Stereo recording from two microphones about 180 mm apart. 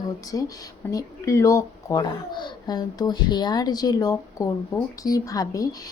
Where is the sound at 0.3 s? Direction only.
20° left (ahead or behind).